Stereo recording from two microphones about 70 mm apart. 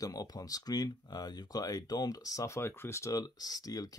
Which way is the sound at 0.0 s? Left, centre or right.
Left.